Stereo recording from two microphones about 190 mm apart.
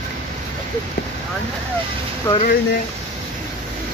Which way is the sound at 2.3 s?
20° left (ahead or behind).